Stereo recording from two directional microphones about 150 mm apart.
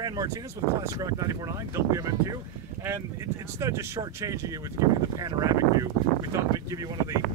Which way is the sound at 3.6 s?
20° right (ahead or behind).